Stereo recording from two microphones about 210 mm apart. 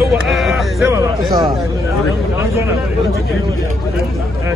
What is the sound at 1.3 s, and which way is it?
Speech, 20° right (ahead or behind).